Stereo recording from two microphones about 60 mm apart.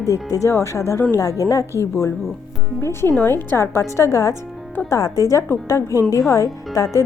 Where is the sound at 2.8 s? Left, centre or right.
Left.